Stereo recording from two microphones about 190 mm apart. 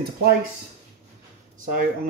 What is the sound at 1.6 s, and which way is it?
Speech, 50° right (ahead or behind).